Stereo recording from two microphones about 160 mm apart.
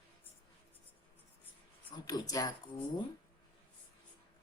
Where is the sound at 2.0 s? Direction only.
25° left (ahead or behind).